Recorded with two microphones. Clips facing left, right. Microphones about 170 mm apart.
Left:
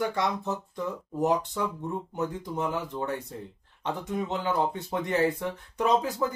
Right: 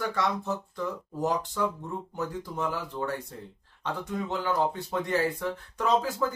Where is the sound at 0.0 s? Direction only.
20° left (ahead or behind).